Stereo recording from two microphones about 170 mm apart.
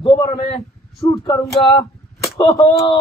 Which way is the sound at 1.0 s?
20° left (ahead or behind).